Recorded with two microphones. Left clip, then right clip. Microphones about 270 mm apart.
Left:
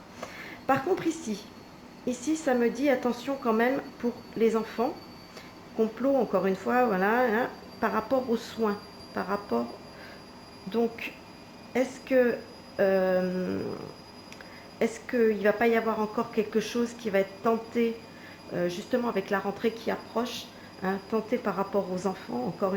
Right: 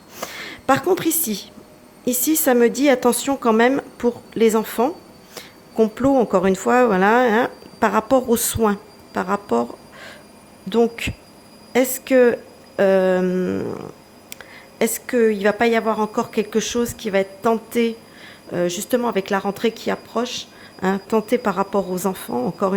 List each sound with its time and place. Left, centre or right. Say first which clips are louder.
0.2 s a sound: right 10 dB; right
2.0 s a woman's voice: right 9 dB; right
14.8 s a woman's voice: right 8 dB; right